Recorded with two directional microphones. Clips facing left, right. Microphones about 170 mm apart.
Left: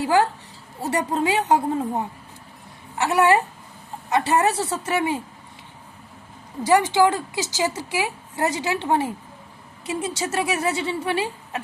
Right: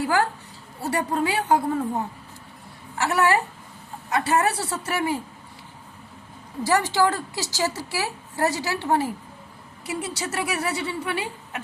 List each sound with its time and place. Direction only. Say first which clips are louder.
0.0 s a woman's voice: left 3 dB; 20° left (ahead or behind)
3.0 s a woman's voice: left 3 dB; 15° left (ahead or behind)
6.7 s a woman's voice: left 4 dB; 20° left (ahead or behind)